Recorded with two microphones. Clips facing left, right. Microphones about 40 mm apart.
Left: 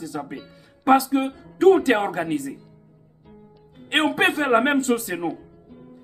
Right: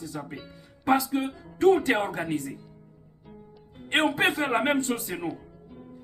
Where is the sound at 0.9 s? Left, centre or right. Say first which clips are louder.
Left 6 dB; left.